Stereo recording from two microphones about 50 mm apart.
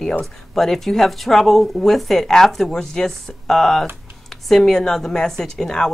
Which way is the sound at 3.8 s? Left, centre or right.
Right.